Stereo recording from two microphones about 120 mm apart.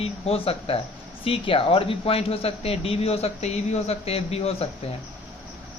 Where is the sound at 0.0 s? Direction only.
55° left (ahead or behind).